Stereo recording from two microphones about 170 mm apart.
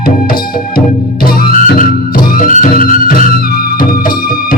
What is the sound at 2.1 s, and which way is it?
Music, 55° left (ahead or behind).